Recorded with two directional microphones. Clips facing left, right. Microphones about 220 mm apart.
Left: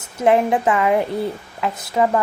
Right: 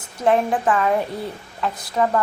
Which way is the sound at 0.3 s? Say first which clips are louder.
Left 2 dB; 20° left (ahead or behind).